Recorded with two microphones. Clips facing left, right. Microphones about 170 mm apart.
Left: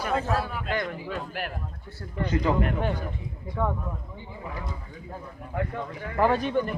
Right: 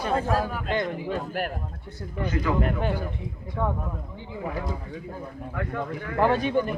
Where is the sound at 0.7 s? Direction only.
25° right (ahead or behind).